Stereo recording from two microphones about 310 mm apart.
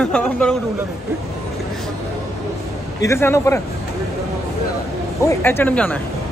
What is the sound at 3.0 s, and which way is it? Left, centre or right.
Speech, centre.